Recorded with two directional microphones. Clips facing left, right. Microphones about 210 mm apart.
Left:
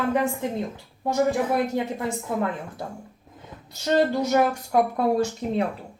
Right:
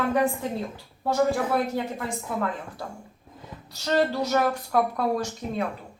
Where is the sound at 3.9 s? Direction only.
20° left (ahead or behind).